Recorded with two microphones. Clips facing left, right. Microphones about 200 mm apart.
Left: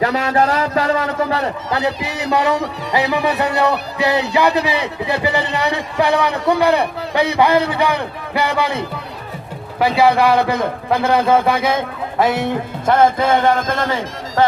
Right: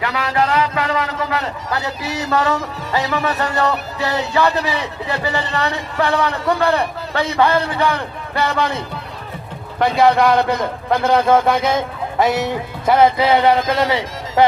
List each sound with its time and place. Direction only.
0.0 s a man's voice: 35° left (ahead or behind)
1.8 s speech: 60° left (ahead or behind)
2.3 s speech: 15° left (ahead or behind)
9.8 s speech: 5° left (ahead or behind)
11.5 s speech: 55° left (ahead or behind)
12.3 s music: 50° left (ahead or behind)
13.0 s speech: 50° left (ahead or behind)